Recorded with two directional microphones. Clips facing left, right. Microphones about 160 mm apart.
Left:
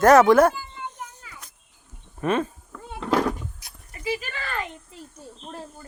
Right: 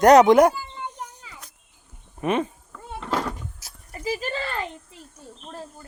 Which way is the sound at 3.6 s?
40° right (ahead or behind).